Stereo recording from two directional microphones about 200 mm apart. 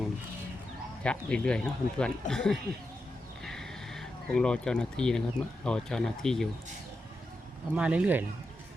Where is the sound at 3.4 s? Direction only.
Centre (ahead or behind).